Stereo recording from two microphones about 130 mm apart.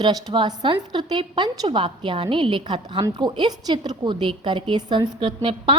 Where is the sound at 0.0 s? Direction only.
30° right (ahead or behind).